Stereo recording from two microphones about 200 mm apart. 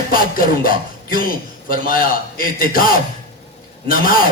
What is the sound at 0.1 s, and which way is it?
Speech, 45° left (ahead or behind).